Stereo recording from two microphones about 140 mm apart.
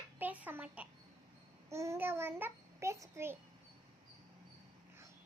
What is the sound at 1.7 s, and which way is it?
Child singing, 20° right (ahead or behind).